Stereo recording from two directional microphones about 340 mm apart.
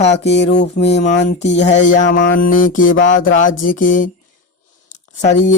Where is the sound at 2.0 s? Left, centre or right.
Left.